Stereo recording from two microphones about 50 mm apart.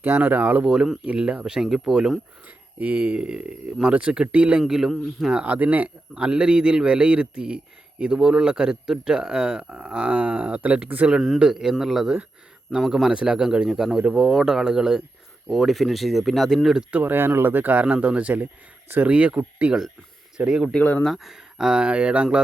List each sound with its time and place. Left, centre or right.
0.2 s speech: right
0.6 s a man's voice: centre
1.0 s a man's voice: right
1.6 s a man's voice: centre
2.7 s a man's voice: right
3.2 s a man's voice: centre
4.6 s a man's voice: centre
5.3 s a man's voice: right
11.1 s a man's voice: centre
16.9 s speech: right
17.8 s a man's voice: right
21.0 s a man's voice: centre; by 22.4 s right